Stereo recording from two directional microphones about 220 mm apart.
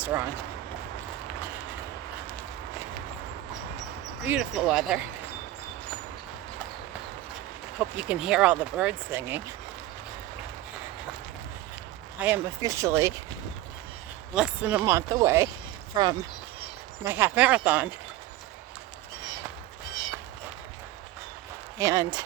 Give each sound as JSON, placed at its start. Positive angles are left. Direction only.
{"t": 0.0, "sound": "speech", "side_deg": -10}
{"t": 4.3, "sound": "speech", "side_deg": 0}
{"t": 7.8, "sound": "speech", "side_deg": -5}
{"t": 12.2, "sound": "speech", "side_deg": -10}
{"t": 14.3, "sound": "speech", "side_deg": -5}
{"t": 21.8, "sound": "speech", "side_deg": -15}